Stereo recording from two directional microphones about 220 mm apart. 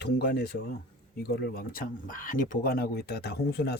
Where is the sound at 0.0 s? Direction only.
50° left (ahead or behind).